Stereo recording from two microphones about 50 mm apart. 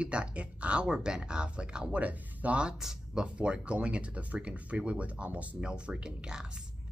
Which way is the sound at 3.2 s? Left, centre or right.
Right.